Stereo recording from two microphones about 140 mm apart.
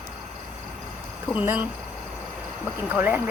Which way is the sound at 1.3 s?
10° right (ahead or behind).